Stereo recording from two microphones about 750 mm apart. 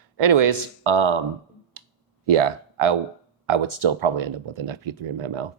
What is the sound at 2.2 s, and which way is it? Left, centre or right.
Speech, right.